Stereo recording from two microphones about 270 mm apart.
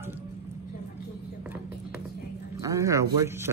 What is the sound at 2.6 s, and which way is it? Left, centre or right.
Speech, centre.